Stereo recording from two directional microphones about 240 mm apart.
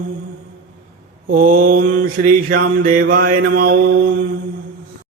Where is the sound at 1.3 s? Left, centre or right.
Right.